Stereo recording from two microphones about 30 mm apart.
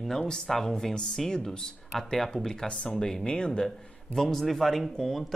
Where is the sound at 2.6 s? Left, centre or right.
Left.